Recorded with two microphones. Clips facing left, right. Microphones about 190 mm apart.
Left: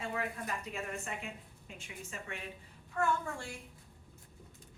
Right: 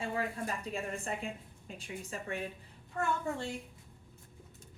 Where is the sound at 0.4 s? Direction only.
30° right (ahead or behind).